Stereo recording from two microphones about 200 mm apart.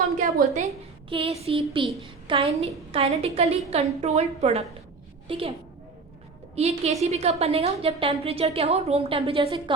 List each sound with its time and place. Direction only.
0.3 s a woman's voice: 35° right (ahead or behind)
6.6 s a woman's voice: 30° right (ahead or behind)